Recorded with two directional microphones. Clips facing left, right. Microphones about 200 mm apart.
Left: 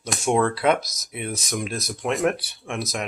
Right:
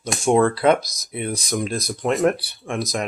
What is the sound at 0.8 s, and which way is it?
Speech, 10° right (ahead or behind).